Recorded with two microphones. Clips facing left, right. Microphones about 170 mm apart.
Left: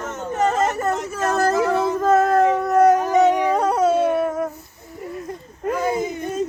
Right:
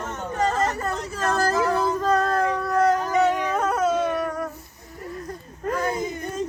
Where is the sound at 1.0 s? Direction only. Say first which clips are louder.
Left 1 dB; 25° left (ahead or behind).